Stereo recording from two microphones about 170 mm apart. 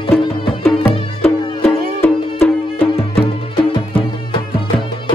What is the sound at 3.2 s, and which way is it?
Music, 30° left (ahead or behind).